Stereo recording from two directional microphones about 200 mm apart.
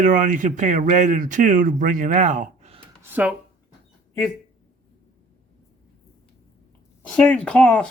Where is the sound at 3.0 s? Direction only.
10° right (ahead or behind).